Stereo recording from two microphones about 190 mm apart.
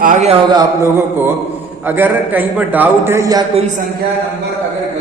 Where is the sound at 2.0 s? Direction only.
10° right (ahead or behind).